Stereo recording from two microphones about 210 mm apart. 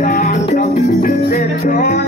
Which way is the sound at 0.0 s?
40° left (ahead or behind).